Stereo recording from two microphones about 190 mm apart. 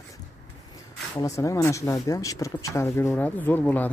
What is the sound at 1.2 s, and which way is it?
Speech, 15° left (ahead or behind).